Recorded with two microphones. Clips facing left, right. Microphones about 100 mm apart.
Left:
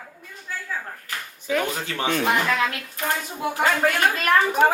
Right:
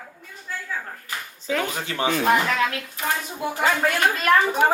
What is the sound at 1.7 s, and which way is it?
Speech, 15° right (ahead or behind).